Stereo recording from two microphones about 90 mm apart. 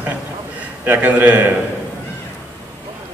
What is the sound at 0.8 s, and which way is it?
Speech, 20° right (ahead or behind).